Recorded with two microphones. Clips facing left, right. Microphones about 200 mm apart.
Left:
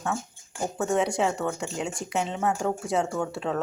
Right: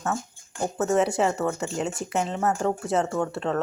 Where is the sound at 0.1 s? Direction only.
5° left (ahead or behind).